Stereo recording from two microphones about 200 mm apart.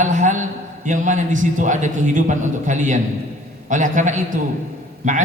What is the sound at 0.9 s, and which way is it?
A man's voice, 40° right (ahead or behind).